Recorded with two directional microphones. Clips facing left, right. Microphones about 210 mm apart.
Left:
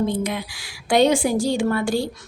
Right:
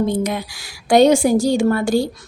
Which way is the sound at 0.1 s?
45° right (ahead or behind).